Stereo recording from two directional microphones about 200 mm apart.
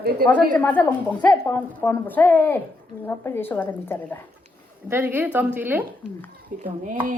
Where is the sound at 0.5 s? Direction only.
10° left (ahead or behind).